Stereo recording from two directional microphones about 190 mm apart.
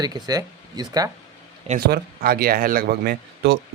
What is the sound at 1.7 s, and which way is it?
Speech, 55° right (ahead or behind).